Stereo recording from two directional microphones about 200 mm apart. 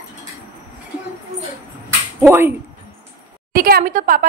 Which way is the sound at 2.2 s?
10° right (ahead or behind).